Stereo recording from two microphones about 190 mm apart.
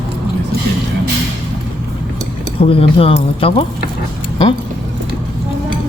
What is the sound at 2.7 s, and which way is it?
Speech, 30° left (ahead or behind).